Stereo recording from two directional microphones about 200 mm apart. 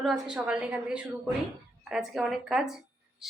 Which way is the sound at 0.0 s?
Centre (ahead or behind).